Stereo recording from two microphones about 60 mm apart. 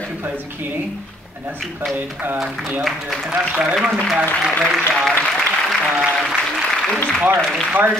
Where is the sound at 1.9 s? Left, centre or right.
Right.